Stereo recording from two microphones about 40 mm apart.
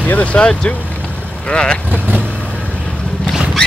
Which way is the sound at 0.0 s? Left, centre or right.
Left.